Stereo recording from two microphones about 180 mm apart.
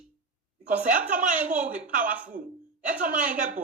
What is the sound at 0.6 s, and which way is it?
Speech, 45° right (ahead or behind).